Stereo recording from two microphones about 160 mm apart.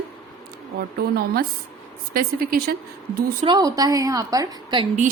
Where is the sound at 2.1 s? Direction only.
65° right (ahead or behind).